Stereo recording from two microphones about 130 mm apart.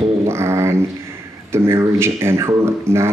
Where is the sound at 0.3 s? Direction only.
20° right (ahead or behind).